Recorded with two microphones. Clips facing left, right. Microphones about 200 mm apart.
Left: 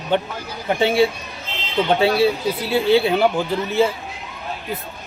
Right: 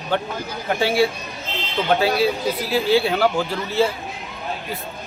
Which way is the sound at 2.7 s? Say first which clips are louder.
Left 3 dB; 25° left (ahead or behind).